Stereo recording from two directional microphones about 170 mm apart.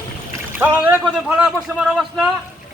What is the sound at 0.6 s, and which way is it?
A man's voice, 15° right (ahead or behind).